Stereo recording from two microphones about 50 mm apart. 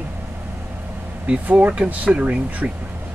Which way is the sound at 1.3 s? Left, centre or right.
Right.